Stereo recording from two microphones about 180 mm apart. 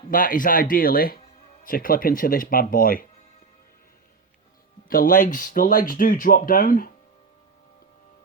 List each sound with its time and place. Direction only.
0.1 s speech: 50° left (ahead or behind)
4.9 s speech: 50° left (ahead or behind)